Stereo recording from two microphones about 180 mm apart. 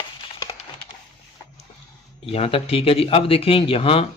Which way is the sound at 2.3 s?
30° left (ahead or behind).